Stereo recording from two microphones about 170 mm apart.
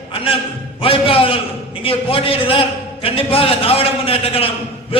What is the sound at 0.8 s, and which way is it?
A man's voice, 30° left (ahead or behind).